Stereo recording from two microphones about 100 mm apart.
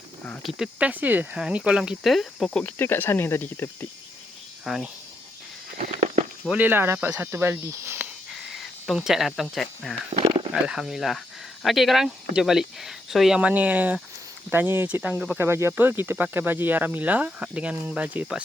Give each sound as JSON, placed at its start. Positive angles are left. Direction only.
{"t": 0.6, "sound": "speech", "side_deg": -15}
{"t": 2.5, "sound": "speech", "side_deg": 10}
{"t": 2.7, "sound": "speech", "side_deg": 25}
{"t": 4.6, "sound": "speech", "side_deg": -5}
{"t": 6.5, "sound": "speech", "side_deg": -20}
{"t": 8.3, "sound": "cricket", "side_deg": 0}
{"t": 10.2, "sound": "a sound", "side_deg": -65}
{"t": 10.5, "sound": "speech", "side_deg": -5}